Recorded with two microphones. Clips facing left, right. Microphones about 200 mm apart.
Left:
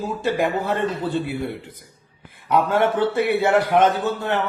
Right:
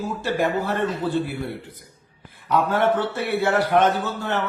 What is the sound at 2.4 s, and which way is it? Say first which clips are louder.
A woman's voice: left 1 dB; 10° left (ahead or behind).